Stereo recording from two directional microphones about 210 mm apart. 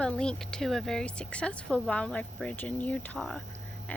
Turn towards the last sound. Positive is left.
turn(degrees=5)  # may be behind; listen again after turning